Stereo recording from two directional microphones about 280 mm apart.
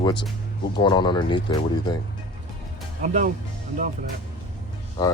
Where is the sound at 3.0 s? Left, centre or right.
Right.